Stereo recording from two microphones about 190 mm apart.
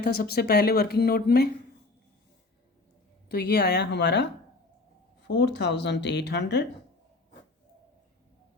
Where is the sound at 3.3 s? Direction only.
60° left (ahead or behind).